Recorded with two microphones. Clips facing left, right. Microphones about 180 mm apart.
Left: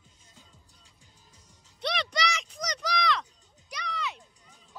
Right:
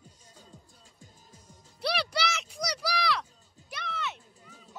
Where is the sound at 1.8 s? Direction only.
5° right (ahead or behind).